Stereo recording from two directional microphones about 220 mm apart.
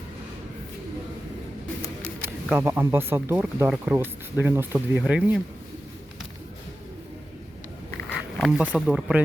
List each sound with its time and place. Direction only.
2.2 s speech: 10° right (ahead or behind)
8.4 s speech: 5° right (ahead or behind)